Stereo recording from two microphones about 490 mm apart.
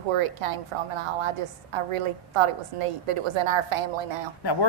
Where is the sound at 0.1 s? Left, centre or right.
Right.